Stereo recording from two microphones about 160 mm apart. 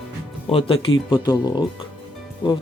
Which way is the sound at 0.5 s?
35° left (ahead or behind).